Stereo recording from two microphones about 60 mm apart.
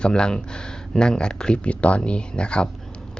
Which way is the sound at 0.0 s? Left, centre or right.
Centre.